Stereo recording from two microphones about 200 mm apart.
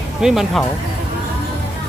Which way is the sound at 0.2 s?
Centre (ahead or behind).